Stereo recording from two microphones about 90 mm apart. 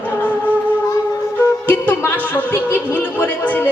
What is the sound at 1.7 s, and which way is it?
Speech, 20° left (ahead or behind).